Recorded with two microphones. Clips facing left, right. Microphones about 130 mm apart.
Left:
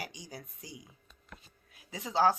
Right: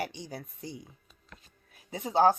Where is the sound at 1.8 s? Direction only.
50° right (ahead or behind).